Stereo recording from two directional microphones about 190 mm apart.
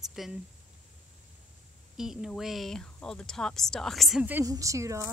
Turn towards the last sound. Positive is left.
turn(degrees=-15)  # may be behind; listen again after turning